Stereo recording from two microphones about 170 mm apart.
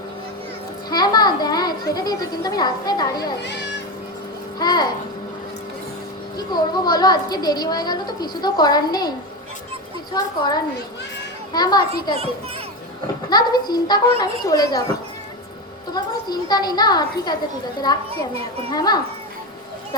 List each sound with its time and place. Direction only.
0.9 s a sound: 25° left (ahead or behind)
3.4 s speech: 90° left
4.6 s speech: 25° left (ahead or behind)
6.3 s speech: 25° left (ahead or behind)
10.2 s speech: 25° left (ahead or behind)
13.3 s speech: 25° left (ahead or behind)
16.3 s speech: 25° left (ahead or behind)
18.7 s speech: 25° left (ahead or behind)